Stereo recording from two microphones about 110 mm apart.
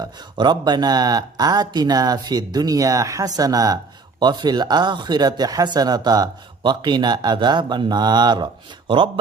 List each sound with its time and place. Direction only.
0.0 s speech: 40° right (ahead or behind)
8.9 s speech: 55° right (ahead or behind)